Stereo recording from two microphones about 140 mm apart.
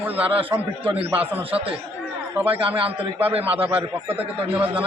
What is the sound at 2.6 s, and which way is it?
Speech, 40° right (ahead or behind).